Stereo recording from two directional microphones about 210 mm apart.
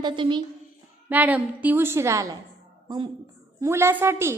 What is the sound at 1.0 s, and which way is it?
A woman's voice, 10° right (ahead or behind).